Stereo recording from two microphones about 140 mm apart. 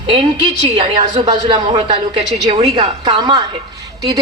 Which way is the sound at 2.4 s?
45° right (ahead or behind).